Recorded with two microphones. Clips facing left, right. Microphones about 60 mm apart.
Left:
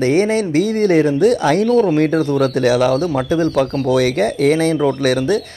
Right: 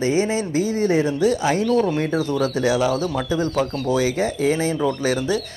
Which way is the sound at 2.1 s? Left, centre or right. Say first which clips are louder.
Left 6 dB; left.